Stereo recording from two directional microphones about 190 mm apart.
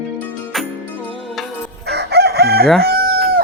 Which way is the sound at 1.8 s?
60° right (ahead or behind).